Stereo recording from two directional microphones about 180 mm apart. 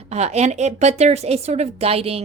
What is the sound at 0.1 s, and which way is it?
A woman's voice, 40° right (ahead or behind).